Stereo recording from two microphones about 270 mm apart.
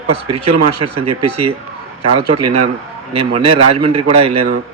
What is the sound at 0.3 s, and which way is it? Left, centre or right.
A man's voice, right.